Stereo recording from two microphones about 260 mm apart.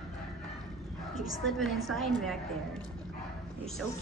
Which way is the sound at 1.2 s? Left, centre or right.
Centre.